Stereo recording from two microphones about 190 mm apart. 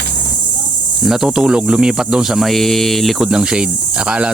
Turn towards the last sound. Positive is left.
turn(degrees=-5)  # may be behind; listen again after turning